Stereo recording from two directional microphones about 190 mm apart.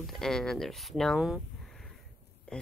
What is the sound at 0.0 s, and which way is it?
Speech, centre (ahead or behind).